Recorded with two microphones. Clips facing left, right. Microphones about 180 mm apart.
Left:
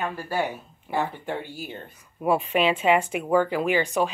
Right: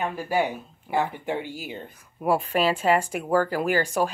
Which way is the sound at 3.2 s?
Centre (ahead or behind).